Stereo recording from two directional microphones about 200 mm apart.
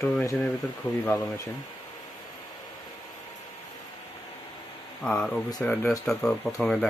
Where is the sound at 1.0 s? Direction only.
15° left (ahead or behind).